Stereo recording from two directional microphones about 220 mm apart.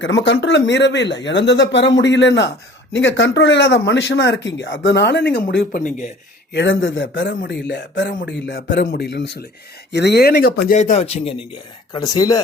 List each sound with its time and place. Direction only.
0.0 s speech: 55° left (ahead or behind); by 6.1 s 40° left (ahead or behind)
6.5 s a man's voice: 55° left (ahead or behind); by 11.4 s 25° left (ahead or behind)
11.9 s speech: 15° left (ahead or behind)